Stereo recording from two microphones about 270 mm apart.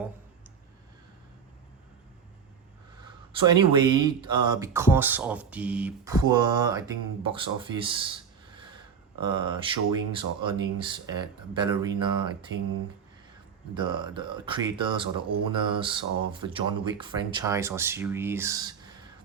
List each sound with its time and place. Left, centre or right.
3.0 s a sound: centre
4.0 s speech: centre
13.7 s speech: centre